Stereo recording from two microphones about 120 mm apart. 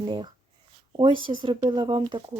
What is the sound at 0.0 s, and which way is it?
Speech, 40° right (ahead or behind).